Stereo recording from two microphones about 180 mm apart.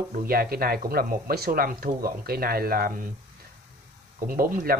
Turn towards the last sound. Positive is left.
turn(degrees=-50)  # may be behind; listen again after turning